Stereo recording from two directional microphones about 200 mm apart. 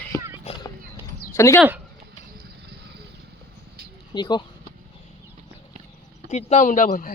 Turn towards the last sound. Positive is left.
turn(degrees=40)  # may be behind; listen again after turning